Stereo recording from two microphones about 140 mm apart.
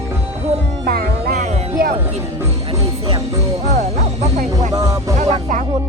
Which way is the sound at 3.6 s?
55° right (ahead or behind).